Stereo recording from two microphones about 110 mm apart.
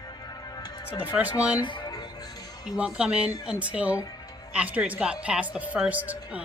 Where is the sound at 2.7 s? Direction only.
5° right (ahead or behind).